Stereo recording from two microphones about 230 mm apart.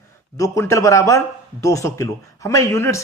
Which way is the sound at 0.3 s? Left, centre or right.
Centre.